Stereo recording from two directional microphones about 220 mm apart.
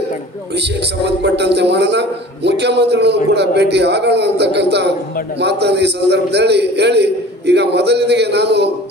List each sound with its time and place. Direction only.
0.6 s a man's voice: 50° right (ahead or behind)